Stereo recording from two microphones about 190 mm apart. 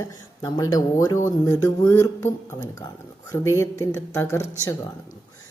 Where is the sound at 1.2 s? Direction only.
15° left (ahead or behind).